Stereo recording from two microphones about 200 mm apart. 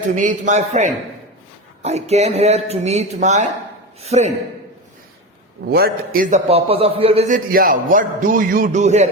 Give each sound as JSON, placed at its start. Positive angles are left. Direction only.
{"t": 0.2, "sound": "a man's voice", "side_deg": -35}
{"t": 5.6, "sound": "a man's voice", "side_deg": -50}